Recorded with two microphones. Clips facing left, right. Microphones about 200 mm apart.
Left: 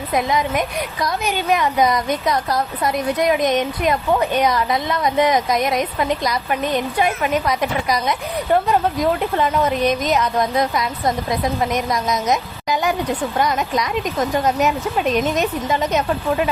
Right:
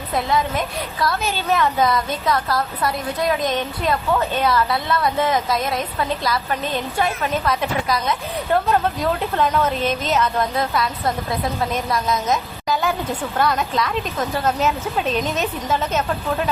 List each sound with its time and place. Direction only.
0.1 s a woman's voice: 15° left (ahead or behind)